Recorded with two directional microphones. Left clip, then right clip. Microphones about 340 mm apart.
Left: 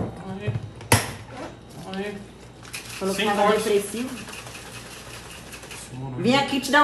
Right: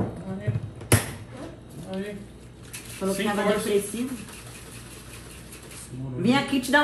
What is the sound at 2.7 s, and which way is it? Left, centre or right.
Speech, centre.